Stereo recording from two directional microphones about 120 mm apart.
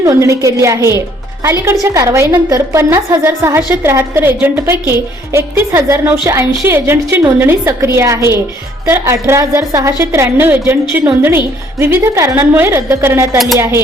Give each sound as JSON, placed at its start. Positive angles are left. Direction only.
{"t": 0.0, "sound": "a woman's voice", "side_deg": -25}